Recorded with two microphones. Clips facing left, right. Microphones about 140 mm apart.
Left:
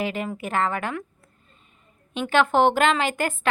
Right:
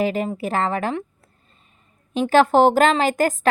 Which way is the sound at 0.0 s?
35° right (ahead or behind).